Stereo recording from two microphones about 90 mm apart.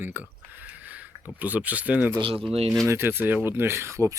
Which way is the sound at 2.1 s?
80° right.